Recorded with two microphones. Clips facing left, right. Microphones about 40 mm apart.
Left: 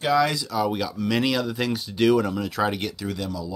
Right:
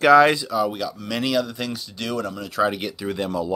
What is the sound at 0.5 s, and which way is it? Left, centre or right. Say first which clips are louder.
Speech: right 1 dB; centre.